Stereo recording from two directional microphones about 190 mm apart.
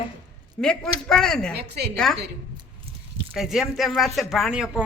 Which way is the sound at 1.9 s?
Centre (ahead or behind).